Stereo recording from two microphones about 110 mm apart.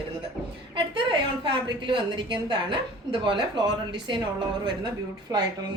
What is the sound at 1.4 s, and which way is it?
A woman's voice, 50° right (ahead or behind).